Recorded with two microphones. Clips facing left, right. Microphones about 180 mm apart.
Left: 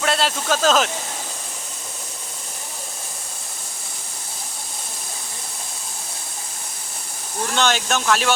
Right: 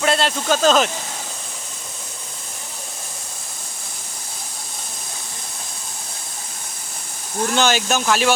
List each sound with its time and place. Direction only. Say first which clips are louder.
0.0 s speech: right 2 dB; centre (ahead or behind)
7.5 s speech: right 2 dB; 5° right (ahead or behind)